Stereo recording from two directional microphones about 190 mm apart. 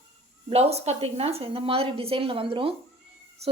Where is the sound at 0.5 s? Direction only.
35° right (ahead or behind).